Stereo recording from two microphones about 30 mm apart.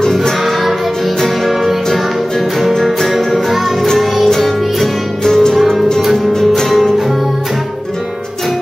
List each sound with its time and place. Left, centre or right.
0.0 s music: left
2.7 s music: centre
5.2 s music: centre
5.6 s music: centre